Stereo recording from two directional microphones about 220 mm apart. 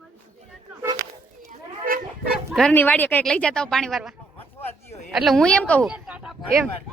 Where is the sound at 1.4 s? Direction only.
40° right (ahead or behind).